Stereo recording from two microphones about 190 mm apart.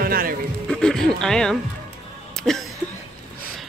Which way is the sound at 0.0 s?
50° right (ahead or behind).